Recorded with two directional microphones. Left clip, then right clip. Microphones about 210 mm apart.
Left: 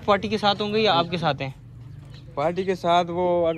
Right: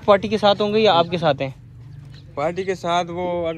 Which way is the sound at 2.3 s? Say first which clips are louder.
Right 1 dB; 30° right (ahead or behind).